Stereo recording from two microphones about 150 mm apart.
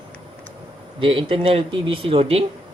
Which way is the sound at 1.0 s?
35° right (ahead or behind).